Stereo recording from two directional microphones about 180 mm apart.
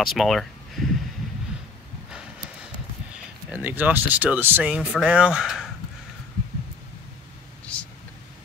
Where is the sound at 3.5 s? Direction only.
10° right (ahead or behind).